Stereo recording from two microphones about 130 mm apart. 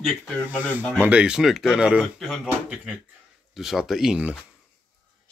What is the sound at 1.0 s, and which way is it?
Speech, 10° right (ahead or behind).